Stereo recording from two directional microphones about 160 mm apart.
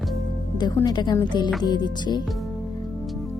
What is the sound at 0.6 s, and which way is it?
A woman's voice, 25° left (ahead or behind).